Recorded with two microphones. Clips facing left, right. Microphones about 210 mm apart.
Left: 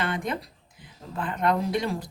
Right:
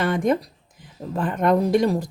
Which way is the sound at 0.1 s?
45° right (ahead or behind).